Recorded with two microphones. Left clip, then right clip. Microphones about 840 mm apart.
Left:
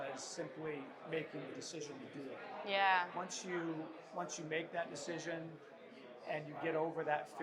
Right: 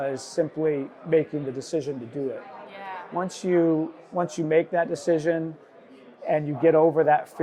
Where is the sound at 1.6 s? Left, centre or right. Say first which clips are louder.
Right 19 dB; right.